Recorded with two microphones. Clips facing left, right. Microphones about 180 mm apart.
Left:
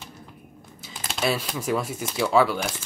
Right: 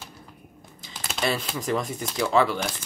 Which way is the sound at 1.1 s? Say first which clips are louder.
Left 1 dB; centre (ahead or behind).